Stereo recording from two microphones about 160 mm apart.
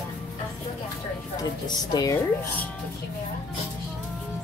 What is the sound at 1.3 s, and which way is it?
Speech, 25° left (ahead or behind).